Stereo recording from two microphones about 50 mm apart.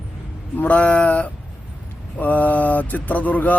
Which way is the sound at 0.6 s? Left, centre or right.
Left.